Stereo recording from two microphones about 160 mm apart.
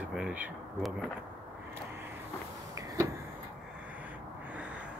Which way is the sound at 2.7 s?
20° right (ahead or behind).